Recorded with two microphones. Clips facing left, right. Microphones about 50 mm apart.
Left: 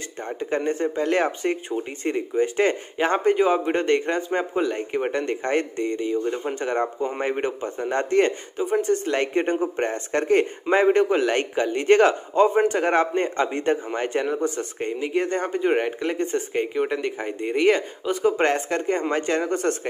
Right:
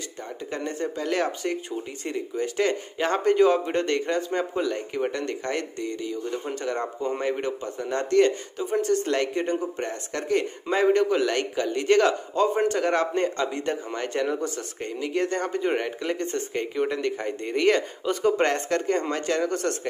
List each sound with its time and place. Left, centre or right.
0.2 s speech: left